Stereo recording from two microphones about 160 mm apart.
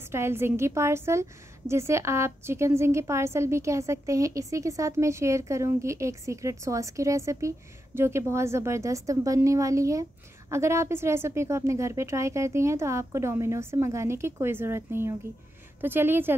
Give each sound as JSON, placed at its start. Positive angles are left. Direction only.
{"t": 0.1, "sound": "a woman's voice", "side_deg": -15}